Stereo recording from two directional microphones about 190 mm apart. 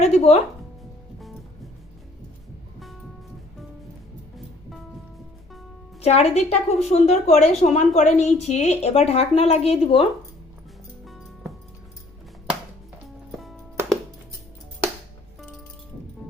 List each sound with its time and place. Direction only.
0.0 s a woman's voice: 35° left (ahead or behind)
6.0 s a woman's voice: 35° left (ahead or behind)